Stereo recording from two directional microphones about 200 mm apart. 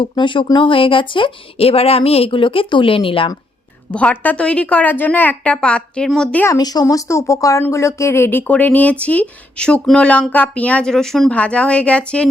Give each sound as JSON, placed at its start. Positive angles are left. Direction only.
{"t": 0.0, "sound": "speech", "side_deg": 25}
{"t": 3.9, "sound": "speech", "side_deg": 5}